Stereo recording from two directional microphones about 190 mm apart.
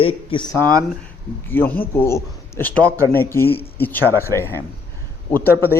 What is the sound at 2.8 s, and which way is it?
Speech, 15° right (ahead or behind).